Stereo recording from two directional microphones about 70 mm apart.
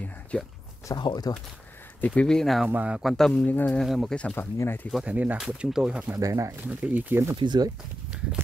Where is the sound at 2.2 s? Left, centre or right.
Centre.